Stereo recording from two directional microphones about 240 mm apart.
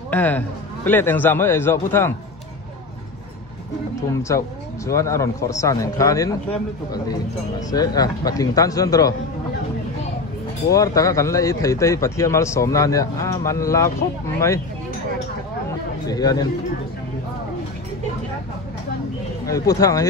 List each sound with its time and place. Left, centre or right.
0.1 s a man's voice: centre
4.3 s a man's voice: centre
7.7 s a man's voice: centre
10.7 s a man's voice: centre
16.1 s a man's voice: centre
19.4 s a man's voice: centre